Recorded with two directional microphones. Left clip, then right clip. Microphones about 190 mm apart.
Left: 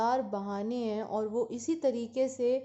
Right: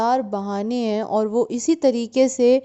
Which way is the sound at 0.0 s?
45° right (ahead or behind).